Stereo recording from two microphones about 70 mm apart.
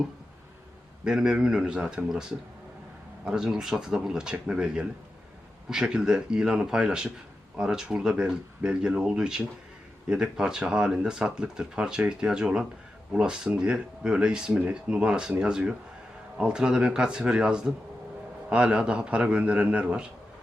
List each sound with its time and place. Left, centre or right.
1.0 s speech: centre
3.2 s speech: centre